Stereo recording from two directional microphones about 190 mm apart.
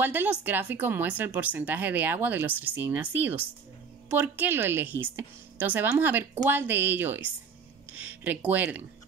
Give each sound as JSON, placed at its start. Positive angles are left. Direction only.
{"t": 0.0, "sound": "speech", "side_deg": -10}